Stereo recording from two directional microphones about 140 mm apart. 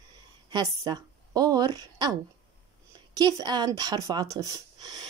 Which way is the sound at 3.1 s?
30° right (ahead or behind).